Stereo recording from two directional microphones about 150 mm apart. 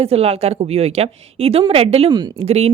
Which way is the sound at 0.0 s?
40° right (ahead or behind).